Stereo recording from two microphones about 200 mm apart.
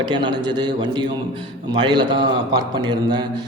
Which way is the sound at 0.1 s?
20° right (ahead or behind).